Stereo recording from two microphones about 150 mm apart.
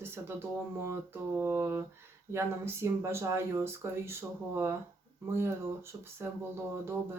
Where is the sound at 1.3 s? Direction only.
15° right (ahead or behind).